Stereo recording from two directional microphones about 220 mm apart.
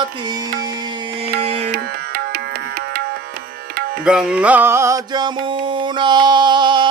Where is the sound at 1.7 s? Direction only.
40° right (ahead or behind).